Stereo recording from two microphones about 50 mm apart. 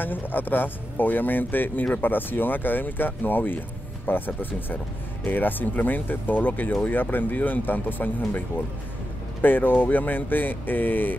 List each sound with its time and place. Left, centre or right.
0.0 s speech: left